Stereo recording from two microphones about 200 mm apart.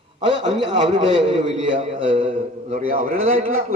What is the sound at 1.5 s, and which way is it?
A man's voice, 40° right (ahead or behind).